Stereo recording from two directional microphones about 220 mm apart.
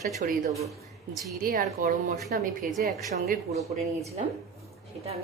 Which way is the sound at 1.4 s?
40° right (ahead or behind).